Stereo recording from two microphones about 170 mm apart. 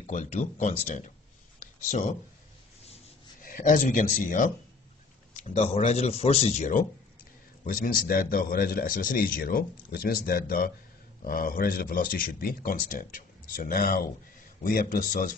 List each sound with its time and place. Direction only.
0.0 s speech: 45° left (ahead or behind)
3.4 s speech: 55° left (ahead or behind)
5.3 s a man's voice: 40° left (ahead or behind)